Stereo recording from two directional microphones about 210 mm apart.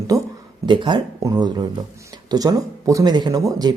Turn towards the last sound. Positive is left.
turn(degrees=-15)  # may be behind; listen again after turning